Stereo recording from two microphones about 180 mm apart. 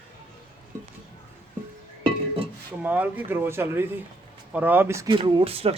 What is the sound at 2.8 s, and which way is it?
Speech, 10° right (ahead or behind).